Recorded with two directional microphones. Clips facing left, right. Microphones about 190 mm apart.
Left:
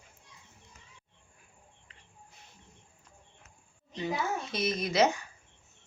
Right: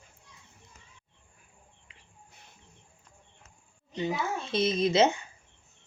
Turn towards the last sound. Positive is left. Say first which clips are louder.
# right 3 dB
turn(degrees=-25)  # may be behind; listen again after turning